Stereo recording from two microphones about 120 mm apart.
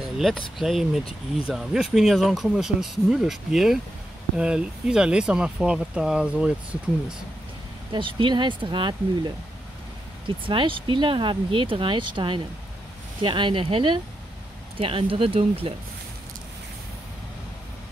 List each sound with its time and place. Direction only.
0.0 s a sound: centre (ahead or behind)
0.6 s speech: centre (ahead or behind)
7.9 s speech: 45° right (ahead or behind)